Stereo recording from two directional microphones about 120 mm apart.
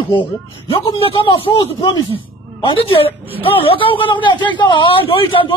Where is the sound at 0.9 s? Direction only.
50° left (ahead or behind).